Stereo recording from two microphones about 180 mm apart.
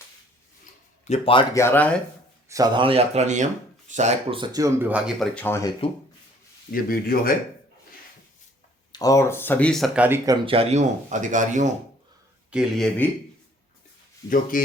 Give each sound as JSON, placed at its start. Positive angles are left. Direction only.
{"t": 0.6, "sound": "a sound", "side_deg": 40}
{"t": 1.5, "sound": "speech", "side_deg": 10}
{"t": 2.5, "sound": "speech", "side_deg": -20}
{"t": 4.4, "sound": "speech", "side_deg": -20}
{"t": 5.3, "sound": "speech", "side_deg": 10}
{"t": 6.7, "sound": "speech", "side_deg": 55}
{"t": 8.9, "sound": "speech", "side_deg": 20}
{"t": 10.2, "sound": "speech", "side_deg": -30}
{"t": 12.5, "sound": "speech", "side_deg": 0}
{"t": 14.5, "sound": "speech", "side_deg": 50}